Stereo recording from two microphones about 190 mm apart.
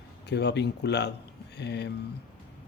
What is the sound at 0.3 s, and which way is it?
Speech, 65° left (ahead or behind).